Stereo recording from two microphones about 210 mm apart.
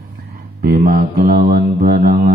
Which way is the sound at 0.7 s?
45° right (ahead or behind).